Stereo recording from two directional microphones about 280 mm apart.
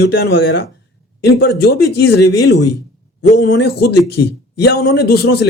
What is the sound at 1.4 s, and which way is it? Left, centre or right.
A man's voice, left.